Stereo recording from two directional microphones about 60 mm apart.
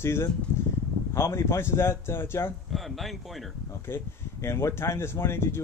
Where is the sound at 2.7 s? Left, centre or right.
Centre.